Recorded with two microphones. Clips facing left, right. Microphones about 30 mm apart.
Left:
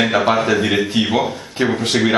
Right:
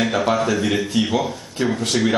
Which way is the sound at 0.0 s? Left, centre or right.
Left.